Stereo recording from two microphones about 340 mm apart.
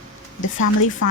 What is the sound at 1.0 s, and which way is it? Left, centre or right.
Chopping, left.